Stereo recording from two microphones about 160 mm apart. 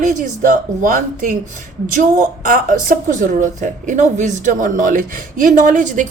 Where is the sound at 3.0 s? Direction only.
55° right (ahead or behind).